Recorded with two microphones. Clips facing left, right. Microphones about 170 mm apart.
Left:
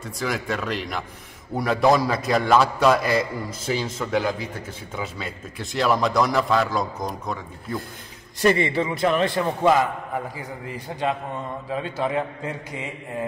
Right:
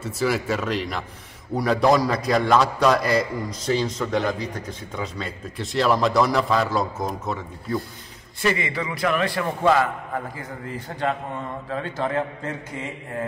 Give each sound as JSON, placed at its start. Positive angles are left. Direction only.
{"t": 0.0, "sound": "a man's voice", "side_deg": -5}
{"t": 8.4, "sound": "a man's voice", "side_deg": 35}